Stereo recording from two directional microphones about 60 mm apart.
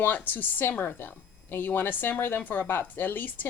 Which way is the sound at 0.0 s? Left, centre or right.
Left.